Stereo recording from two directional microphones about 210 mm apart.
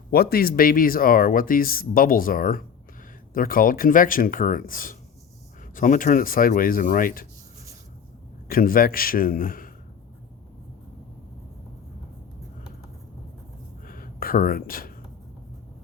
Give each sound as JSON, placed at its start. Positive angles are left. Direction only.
{"t": 0.1, "sound": "speech", "side_deg": 45}
{"t": 8.4, "sound": "speech", "side_deg": 45}
{"t": 13.8, "sound": "a sound", "side_deg": 40}